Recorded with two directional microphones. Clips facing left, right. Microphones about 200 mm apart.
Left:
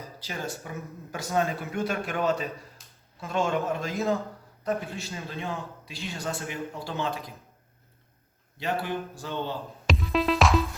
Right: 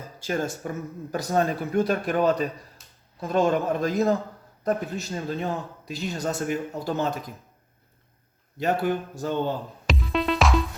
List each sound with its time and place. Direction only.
0.2 s a man's voice: 50° right (ahead or behind)
8.5 s a man's voice: 45° right (ahead or behind)
9.8 s music: centre (ahead or behind)